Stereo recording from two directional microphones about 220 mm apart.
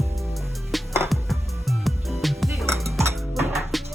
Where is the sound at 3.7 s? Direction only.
Centre (ahead or behind).